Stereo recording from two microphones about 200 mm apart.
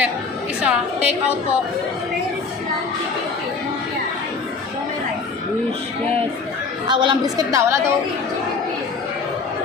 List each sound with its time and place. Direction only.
0.6 s a woman's voice: 5° right (ahead or behind)
6.8 s a woman's voice: 25° right (ahead or behind)